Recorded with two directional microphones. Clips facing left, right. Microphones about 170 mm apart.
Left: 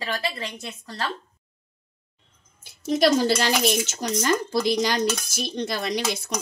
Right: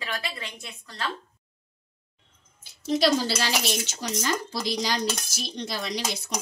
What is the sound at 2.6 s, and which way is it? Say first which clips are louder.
Speech: left 3 dB; 50° left (ahead or behind).